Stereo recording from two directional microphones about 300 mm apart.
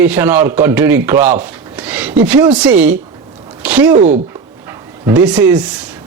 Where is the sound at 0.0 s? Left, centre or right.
Centre.